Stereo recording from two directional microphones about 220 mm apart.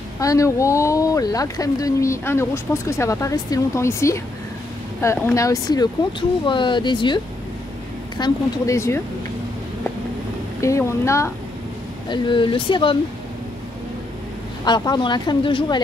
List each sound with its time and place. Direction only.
0.2 s speech: 15° left (ahead or behind)
8.2 s speech: 15° left (ahead or behind)
10.6 s speech: 15° left (ahead or behind)
14.6 s speech: 20° left (ahead or behind)